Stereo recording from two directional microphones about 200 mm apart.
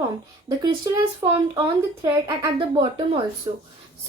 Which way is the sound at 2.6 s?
25° right (ahead or behind).